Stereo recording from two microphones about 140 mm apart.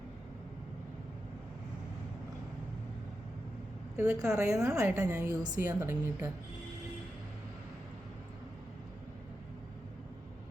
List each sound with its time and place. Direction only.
3.9 s a woman's voice: 20° right (ahead or behind)